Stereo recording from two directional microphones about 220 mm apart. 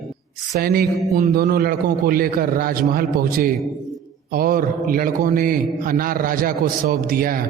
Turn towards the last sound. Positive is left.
turn(degrees=-40)  # may be behind; listen again after turning